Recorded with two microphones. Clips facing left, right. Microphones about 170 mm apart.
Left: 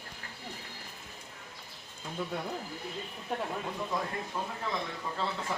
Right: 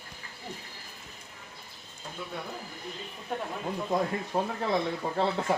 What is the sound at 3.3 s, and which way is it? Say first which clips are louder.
Speech: even; centre (ahead or behind).